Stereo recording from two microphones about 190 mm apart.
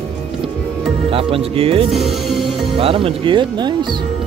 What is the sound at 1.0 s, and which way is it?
Speech, 30° right (ahead or behind).